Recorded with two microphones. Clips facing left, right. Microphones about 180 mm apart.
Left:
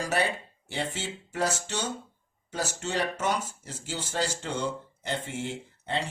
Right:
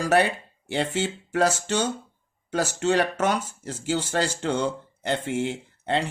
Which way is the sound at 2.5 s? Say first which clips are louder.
Right 9 dB; 90° right.